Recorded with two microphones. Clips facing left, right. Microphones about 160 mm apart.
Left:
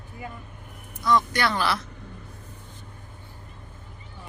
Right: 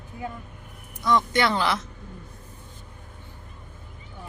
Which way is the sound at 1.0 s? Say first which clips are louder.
Right 1 dB; 20° right (ahead or behind).